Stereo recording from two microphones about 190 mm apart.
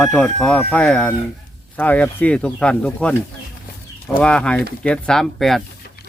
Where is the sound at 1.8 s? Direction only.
10° left (ahead or behind).